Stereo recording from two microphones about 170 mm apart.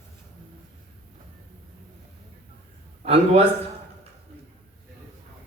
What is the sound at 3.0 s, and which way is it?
Speech, 35° right (ahead or behind).